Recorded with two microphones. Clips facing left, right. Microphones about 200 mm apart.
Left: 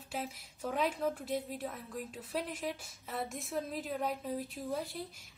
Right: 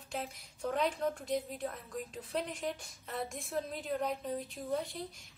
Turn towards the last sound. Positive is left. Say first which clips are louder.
# right 1 dB
turn(degrees=0)  # may be behind; listen again after turning